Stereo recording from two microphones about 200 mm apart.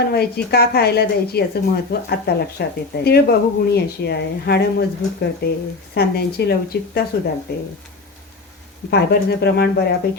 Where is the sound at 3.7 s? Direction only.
55° left (ahead or behind).